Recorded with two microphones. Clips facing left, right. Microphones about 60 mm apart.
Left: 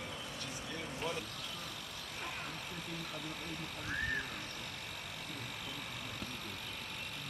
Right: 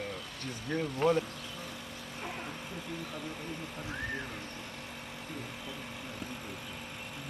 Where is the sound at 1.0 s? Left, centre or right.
Right.